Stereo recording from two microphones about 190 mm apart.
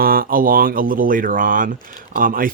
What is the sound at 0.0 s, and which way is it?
Speech, 50° right (ahead or behind).